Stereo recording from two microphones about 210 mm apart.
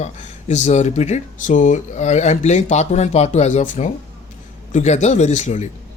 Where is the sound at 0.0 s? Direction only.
35° left (ahead or behind).